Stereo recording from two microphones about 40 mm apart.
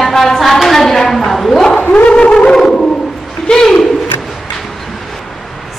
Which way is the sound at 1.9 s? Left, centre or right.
Left.